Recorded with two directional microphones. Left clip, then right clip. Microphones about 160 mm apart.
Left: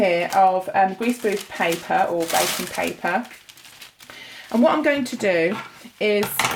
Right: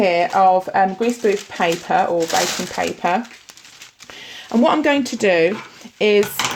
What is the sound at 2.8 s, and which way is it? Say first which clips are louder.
Speech: right 4 dB; 55° right (ahead or behind).